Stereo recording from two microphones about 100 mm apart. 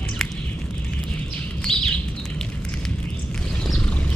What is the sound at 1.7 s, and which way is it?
Bird, 5° left (ahead or behind).